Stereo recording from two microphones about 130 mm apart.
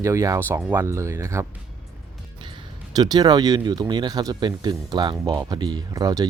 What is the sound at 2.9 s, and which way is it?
Speech, 30° right (ahead or behind).